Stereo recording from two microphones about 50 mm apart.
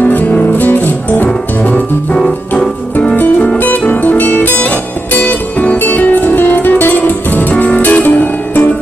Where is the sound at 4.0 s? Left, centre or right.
Left.